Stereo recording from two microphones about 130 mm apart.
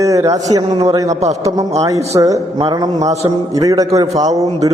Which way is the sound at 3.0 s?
60° right (ahead or behind).